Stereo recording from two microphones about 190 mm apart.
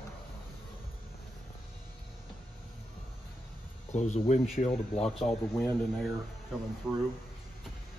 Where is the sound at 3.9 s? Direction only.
40° left (ahead or behind).